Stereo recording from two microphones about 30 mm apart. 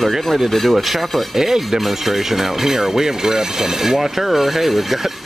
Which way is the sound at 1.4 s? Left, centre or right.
Centre.